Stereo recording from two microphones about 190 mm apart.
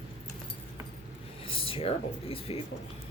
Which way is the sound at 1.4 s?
30° left (ahead or behind).